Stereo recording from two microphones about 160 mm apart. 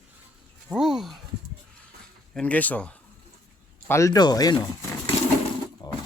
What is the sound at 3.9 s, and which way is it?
Speech, 20° left (ahead or behind).